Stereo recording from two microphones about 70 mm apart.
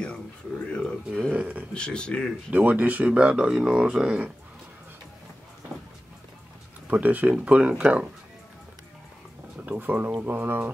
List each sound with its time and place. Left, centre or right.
0.7 s a sound: centre
1.3 s speech: right
1.7 s a man's voice: centre
2.5 s speech: right
6.9 s speech: right
9.7 s speech: right